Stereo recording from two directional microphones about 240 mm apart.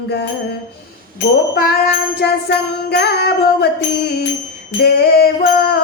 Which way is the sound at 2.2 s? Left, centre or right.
Left.